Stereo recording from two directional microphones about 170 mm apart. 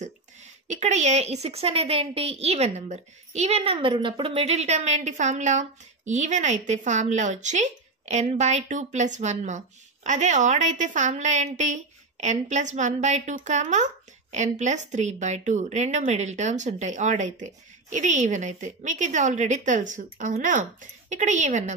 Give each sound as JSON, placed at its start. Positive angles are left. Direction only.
{"t": 0.7, "sound": "a woman's voice", "side_deg": -45}